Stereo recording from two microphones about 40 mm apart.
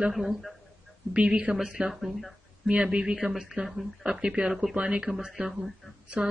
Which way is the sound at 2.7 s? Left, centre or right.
Right.